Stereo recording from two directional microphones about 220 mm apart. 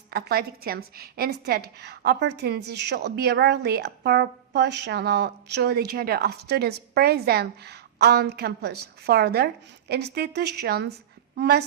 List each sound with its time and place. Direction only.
0.1 s a woman's voice: 45° right (ahead or behind)